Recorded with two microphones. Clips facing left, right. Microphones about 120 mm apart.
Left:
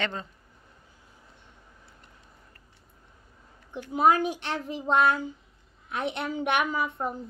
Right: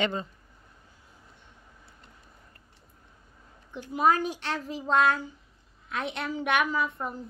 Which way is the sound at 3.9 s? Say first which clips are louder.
Left 2 dB; 20° left (ahead or behind).